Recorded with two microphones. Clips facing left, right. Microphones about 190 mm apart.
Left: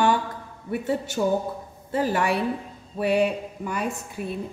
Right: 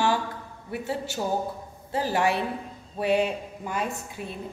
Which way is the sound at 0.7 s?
55° left (ahead or behind).